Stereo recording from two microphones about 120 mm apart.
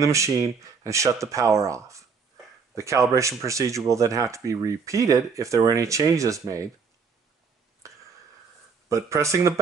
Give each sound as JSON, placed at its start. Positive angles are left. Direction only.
{"t": 0.0, "sound": "speech", "side_deg": -25}
{"t": 8.8, "sound": "speech", "side_deg": -25}